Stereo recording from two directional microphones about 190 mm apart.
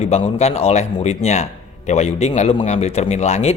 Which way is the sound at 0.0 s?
35° left (ahead or behind).